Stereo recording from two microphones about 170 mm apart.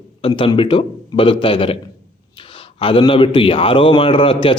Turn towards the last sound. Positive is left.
turn(degrees=30)  # may be behind; listen again after turning